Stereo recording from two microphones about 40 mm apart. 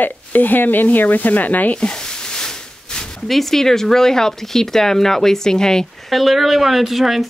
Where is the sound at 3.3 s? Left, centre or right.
Centre.